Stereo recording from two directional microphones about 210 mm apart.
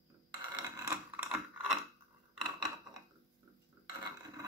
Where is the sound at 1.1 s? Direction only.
5° right (ahead or behind).